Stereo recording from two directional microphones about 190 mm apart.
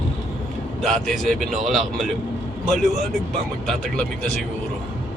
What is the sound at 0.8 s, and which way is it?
Speech, centre (ahead or behind).